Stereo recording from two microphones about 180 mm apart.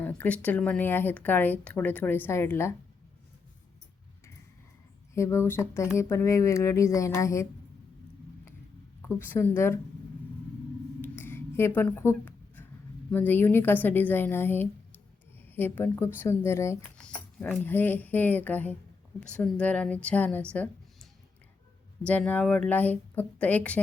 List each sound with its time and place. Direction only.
0.0 s speech: 10° left (ahead or behind)
5.1 s speech: 15° left (ahead or behind)
9.0 s speech: 15° left (ahead or behind)
11.0 s a sound: 10° left (ahead or behind)
13.1 s speech: 10° left (ahead or behind)